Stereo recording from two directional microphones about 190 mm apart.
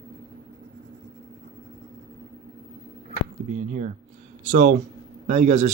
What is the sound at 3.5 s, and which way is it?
Speech, 45° right (ahead or behind).